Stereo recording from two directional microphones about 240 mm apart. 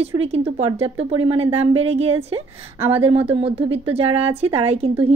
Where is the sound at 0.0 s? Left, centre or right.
Right.